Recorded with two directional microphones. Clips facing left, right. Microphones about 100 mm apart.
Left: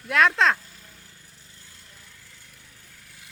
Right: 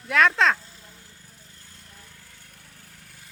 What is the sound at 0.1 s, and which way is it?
Speech, centre (ahead or behind).